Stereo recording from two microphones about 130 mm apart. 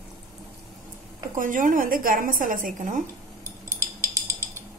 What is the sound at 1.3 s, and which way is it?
A woman's voice, 90° right.